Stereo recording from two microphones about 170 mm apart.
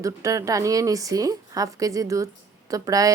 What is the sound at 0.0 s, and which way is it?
Speech, 20° right (ahead or behind).